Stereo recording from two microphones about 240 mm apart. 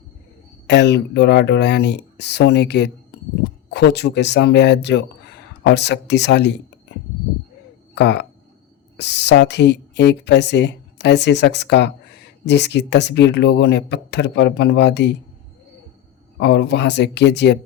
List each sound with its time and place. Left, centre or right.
0.7 s speech: left
7.9 s speech: left
16.4 s speech: left